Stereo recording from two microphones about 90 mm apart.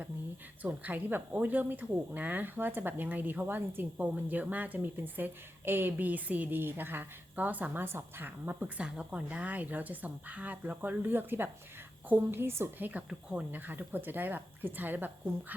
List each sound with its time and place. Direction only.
0.6 s speech: 20° right (ahead or behind)
12.9 s speech: 15° right (ahead or behind)